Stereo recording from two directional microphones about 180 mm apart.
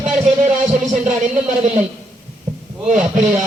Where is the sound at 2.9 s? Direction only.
45° right (ahead or behind).